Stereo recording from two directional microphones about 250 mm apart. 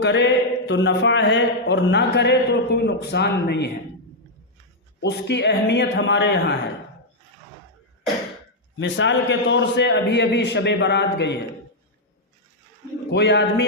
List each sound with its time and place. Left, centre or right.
0.0 s speech: left
4.9 s speech: left
8.8 s speech: left
13.1 s speech: left